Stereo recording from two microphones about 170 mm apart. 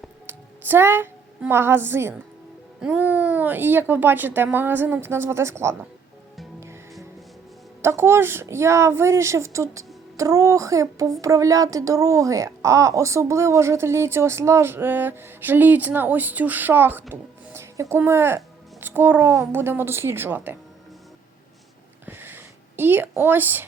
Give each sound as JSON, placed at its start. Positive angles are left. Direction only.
{"t": 0.3, "sound": "a woman's voice", "side_deg": -10}
{"t": 7.8, "sound": "a woman's voice", "side_deg": -15}
{"t": 22.0, "sound": "a sound", "side_deg": -10}
{"t": 22.8, "sound": "a woman's voice", "side_deg": -10}